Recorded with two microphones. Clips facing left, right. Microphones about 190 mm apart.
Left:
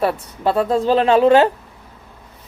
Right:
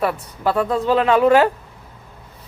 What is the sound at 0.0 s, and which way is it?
Speech, 30° left (ahead or behind).